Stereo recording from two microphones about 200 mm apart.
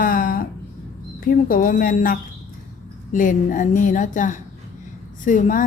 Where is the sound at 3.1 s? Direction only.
40° left (ahead or behind).